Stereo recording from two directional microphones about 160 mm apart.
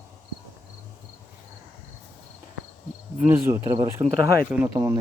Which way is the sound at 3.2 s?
15° right (ahead or behind).